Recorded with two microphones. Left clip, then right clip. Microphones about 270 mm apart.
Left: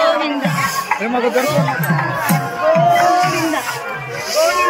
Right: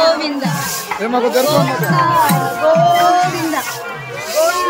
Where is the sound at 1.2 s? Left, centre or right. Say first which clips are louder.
Right 3 dB; right.